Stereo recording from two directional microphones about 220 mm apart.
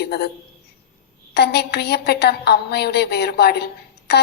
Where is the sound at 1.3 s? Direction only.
50° left (ahead or behind).